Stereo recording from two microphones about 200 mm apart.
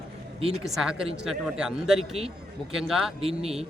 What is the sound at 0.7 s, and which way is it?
A man's voice, 5° right (ahead or behind).